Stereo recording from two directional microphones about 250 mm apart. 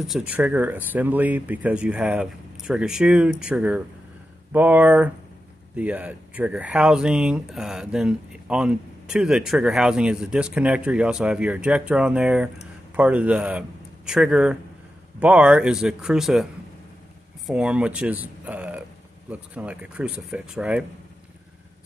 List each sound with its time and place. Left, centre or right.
0.0 s speech: centre
17.5 s speech: centre